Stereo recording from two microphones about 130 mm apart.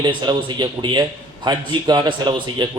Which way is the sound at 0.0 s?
35° right (ahead or behind).